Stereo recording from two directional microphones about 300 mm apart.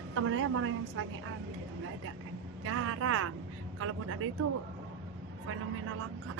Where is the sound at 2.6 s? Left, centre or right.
Right.